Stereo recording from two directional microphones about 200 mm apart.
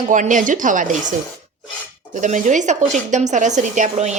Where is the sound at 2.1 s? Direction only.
40° right (ahead or behind).